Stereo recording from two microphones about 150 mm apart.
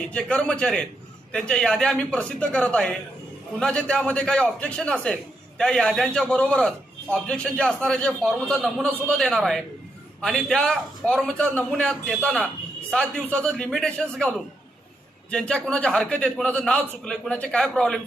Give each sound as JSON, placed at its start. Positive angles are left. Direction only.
{"t": 0.1, "sound": "a man's voice", "side_deg": 5}